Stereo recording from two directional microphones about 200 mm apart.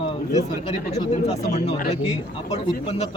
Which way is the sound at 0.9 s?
35° left (ahead or behind).